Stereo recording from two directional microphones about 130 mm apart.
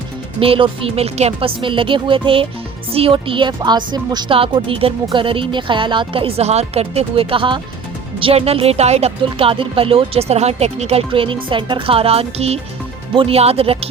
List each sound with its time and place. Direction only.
0.3 s speech: 45° right (ahead or behind)